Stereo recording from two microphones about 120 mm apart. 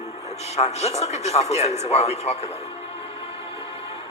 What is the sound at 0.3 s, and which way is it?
A man's voice, 65° left (ahead or behind).